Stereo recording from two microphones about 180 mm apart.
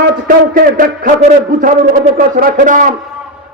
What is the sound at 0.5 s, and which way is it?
A man's voice, 50° right (ahead or behind).